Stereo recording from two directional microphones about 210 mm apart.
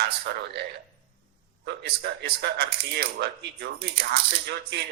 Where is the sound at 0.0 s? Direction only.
50° right (ahead or behind).